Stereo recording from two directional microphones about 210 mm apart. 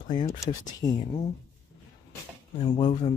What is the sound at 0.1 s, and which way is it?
Speech, 20° left (ahead or behind).